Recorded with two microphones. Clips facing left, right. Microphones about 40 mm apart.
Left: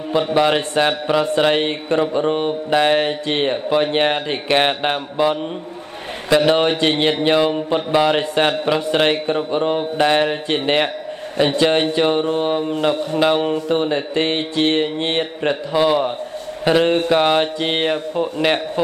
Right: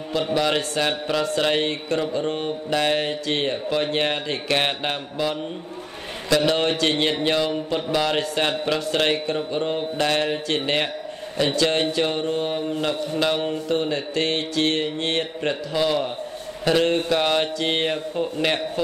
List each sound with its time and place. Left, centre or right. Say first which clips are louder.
0.2 s a man's voice: left 5 dB; left